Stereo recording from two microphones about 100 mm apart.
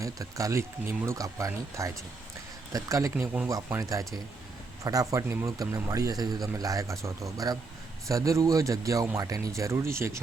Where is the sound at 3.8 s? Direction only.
35° right (ahead or behind).